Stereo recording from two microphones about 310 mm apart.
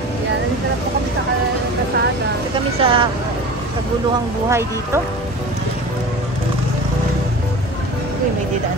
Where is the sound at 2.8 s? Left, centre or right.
Centre.